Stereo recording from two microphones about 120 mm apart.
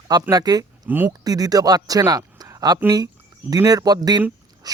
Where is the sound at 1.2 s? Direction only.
30° right (ahead or behind).